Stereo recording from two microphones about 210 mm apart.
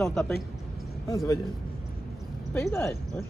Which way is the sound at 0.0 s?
5° left (ahead or behind).